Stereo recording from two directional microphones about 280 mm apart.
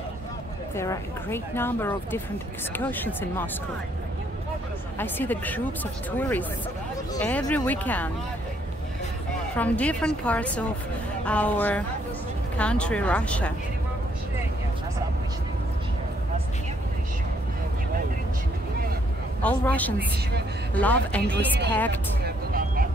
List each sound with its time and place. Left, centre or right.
0.7 s speech: centre
4.9 s a woman's voice: centre
9.6 s a woman's voice: centre
19.4 s a woman's voice: centre
22.2 s vehicle: right